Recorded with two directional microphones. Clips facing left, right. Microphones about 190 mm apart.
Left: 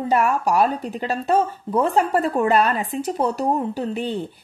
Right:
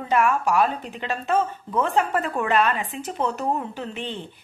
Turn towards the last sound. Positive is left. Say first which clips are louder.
# left 7 dB
turn(degrees=40)  # may be behind; listen again after turning